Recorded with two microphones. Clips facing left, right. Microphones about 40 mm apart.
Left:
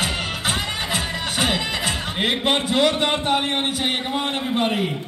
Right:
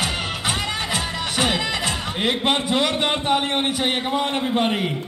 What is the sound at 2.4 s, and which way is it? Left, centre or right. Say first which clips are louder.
A man's voice: left 3 dB; centre.